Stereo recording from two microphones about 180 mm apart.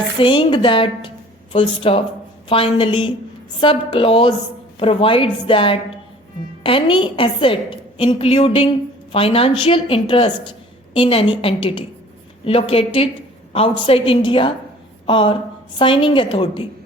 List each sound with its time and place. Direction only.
0.2 s a woman's voice: 30° left (ahead or behind)